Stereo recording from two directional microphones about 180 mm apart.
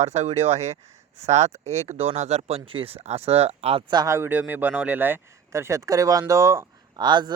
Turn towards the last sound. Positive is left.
turn(degrees=-25)  # may be behind; listen again after turning